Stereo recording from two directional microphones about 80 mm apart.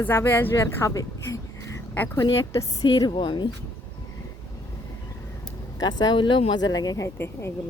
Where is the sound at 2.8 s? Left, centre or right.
Left.